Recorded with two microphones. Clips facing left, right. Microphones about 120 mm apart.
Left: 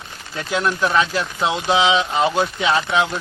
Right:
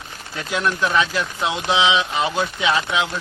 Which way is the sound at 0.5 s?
30° left (ahead or behind).